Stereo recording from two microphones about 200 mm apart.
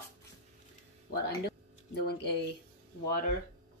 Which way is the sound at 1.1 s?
55° left (ahead or behind).